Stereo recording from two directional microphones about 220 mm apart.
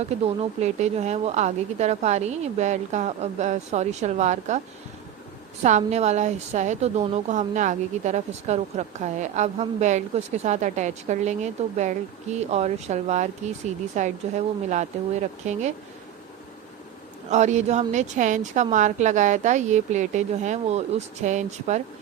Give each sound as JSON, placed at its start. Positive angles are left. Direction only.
{"t": 0.6, "sound": "a woman's voice", "side_deg": -30}
{"t": 5.6, "sound": "a woman's voice", "side_deg": -30}
{"t": 17.2, "sound": "a woman's voice", "side_deg": -30}